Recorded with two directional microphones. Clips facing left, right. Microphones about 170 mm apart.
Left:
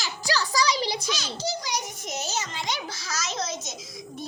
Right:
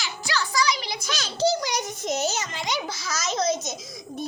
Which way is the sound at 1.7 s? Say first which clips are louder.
Right 5 dB; 60° right (ahead or behind).